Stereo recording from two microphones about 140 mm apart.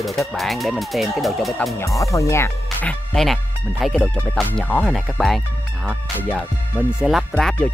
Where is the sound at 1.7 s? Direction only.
20° left (ahead or behind).